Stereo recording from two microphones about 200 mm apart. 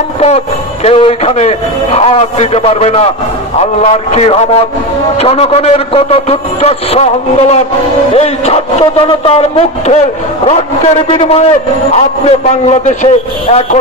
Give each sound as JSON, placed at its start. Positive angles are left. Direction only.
{"t": 0.8, "sound": "a man's voice", "side_deg": 30}